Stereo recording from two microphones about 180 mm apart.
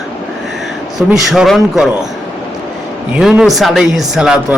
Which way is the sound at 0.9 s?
Centre (ahead or behind).